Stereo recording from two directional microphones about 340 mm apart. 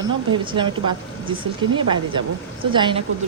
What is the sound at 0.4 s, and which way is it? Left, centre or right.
A woman's voice, centre.